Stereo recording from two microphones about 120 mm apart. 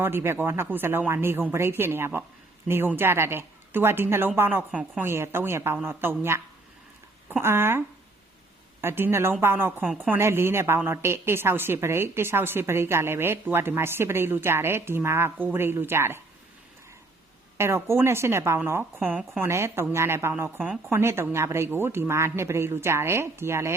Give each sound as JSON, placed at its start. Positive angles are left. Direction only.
{"t": 0.0, "sound": "a woman's voice", "side_deg": -20}
{"t": 7.4, "sound": "a woman's voice", "side_deg": -20}
{"t": 8.8, "sound": "a woman's voice", "side_deg": -20}
{"t": 17.6, "sound": "a woman's voice", "side_deg": -20}